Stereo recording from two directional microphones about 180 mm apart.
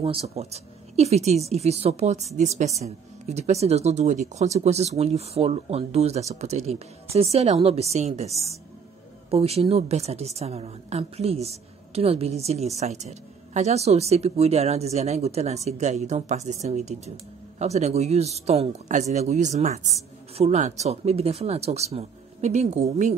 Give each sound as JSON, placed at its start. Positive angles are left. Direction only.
{"t": 0.0, "sound": "a woman's voice", "side_deg": -35}